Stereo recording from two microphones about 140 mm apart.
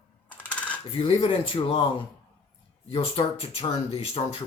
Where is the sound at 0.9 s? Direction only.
40° left (ahead or behind).